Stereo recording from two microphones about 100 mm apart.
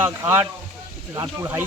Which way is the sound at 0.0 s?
20° right (ahead or behind).